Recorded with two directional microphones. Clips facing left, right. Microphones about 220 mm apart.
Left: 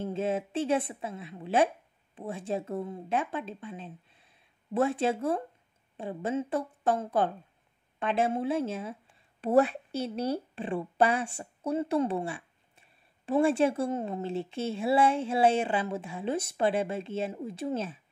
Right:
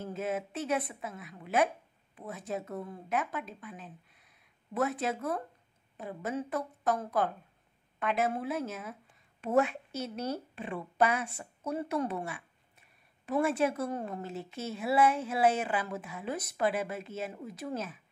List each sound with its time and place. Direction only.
0.0 s a woman's voice: 30° left (ahead or behind)